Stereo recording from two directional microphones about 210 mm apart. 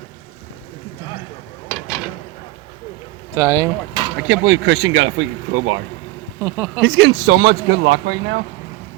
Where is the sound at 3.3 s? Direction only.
15° right (ahead or behind).